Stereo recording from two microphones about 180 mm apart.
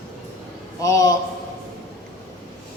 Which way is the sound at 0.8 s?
15° left (ahead or behind).